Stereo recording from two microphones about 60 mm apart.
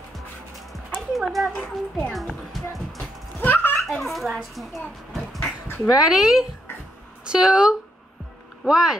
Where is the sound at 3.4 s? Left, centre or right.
Left.